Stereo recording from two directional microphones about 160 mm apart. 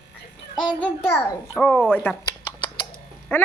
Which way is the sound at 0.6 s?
10° left (ahead or behind).